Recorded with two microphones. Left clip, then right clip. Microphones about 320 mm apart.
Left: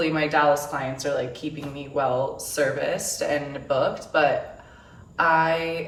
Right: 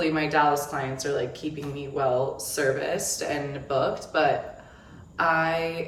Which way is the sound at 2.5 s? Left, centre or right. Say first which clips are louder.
Left 2 dB; centre.